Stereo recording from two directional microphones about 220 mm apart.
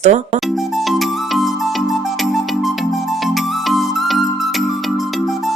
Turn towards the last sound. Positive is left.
turn(degrees=0)  # may be behind; listen again after turning